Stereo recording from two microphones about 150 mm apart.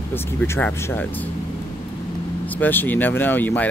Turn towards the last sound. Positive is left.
turn(degrees=15)  # may be behind; listen again after turning